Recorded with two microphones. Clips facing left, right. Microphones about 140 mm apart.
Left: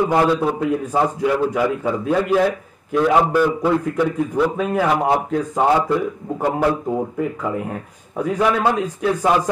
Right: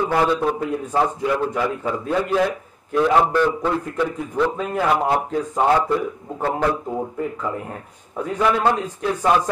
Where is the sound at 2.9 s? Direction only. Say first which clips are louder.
Left 1 dB; 5° left (ahead or behind).